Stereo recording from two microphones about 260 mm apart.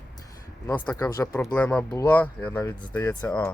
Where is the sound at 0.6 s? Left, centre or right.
Centre.